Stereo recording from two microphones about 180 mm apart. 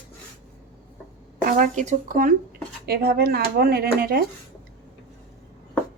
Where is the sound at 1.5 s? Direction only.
45° right (ahead or behind).